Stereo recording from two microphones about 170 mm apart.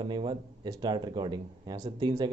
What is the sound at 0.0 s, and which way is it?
Speech, 30° right (ahead or behind).